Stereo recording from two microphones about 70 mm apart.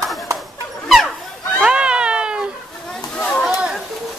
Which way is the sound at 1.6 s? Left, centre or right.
Centre.